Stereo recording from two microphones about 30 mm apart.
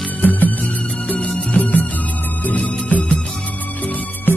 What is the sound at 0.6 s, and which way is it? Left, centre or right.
Music, left.